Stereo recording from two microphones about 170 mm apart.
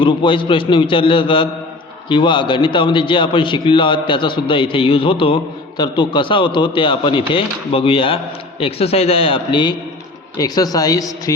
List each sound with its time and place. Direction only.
0.0 s a man's voice: 30° left (ahead or behind)